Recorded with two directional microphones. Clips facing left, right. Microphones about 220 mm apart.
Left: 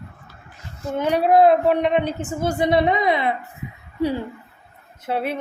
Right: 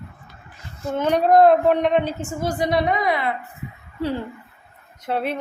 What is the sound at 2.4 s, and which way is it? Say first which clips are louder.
Speech: left 3 dB; 25° left (ahead or behind).